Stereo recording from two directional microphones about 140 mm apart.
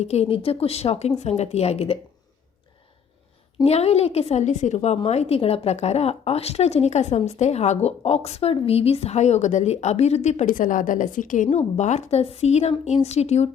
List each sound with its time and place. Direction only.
0.0 s a woman's voice: 50° left (ahead or behind)
3.6 s a woman's voice: 50° left (ahead or behind); by 11.4 s 70° left (ahead or behind)
11.4 s a woman's voice: 55° left (ahead or behind)